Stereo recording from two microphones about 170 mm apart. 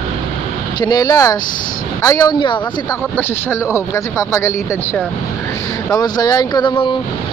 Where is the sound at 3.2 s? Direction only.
15° left (ahead or behind).